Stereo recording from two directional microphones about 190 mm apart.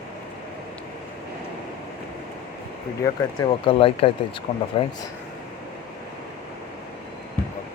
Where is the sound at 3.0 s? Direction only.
25° left (ahead or behind).